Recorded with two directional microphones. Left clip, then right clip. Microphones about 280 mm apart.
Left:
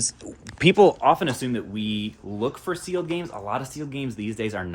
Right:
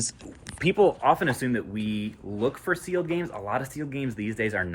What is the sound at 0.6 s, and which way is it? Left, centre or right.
Speech, left.